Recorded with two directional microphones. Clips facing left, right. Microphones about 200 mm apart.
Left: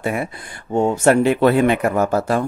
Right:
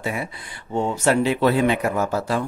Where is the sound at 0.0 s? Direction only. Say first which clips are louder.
Left 5 dB; 55° left (ahead or behind).